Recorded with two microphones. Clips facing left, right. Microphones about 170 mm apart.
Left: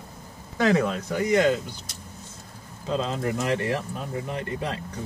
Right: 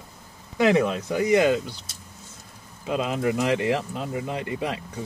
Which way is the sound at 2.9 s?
15° right (ahead or behind).